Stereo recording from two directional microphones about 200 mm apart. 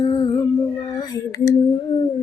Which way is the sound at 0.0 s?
20° left (ahead or behind).